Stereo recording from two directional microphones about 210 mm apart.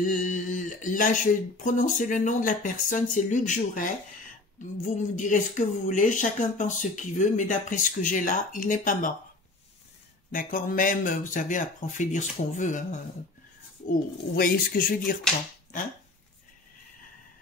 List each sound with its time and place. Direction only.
0.0 s speech: 40° left (ahead or behind)
4.8 s speech: 40° left (ahead or behind)
10.3 s speech: 40° left (ahead or behind)
13.8 s speech: 45° left (ahead or behind)